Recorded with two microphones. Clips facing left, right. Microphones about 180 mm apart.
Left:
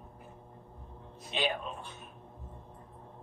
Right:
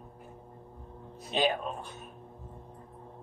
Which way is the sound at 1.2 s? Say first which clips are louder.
Right 5 dB; 40° right (ahead or behind).